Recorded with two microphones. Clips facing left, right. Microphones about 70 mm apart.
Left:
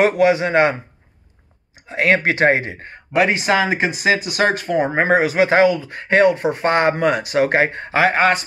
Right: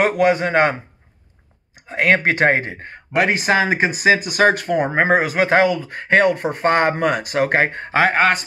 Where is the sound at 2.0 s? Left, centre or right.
Right.